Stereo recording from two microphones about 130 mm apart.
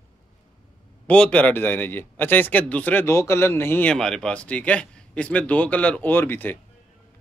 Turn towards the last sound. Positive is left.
turn(degrees=15)  # may be behind; listen again after turning